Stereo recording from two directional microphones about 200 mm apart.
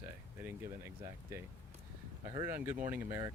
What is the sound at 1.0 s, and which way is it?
Speech, 15° right (ahead or behind).